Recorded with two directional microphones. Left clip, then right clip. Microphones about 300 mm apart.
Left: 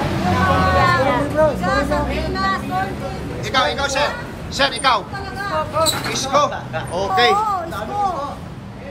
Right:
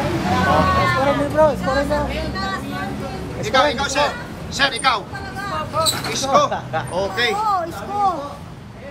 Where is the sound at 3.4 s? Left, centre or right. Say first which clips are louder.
Right 1 dB; centre.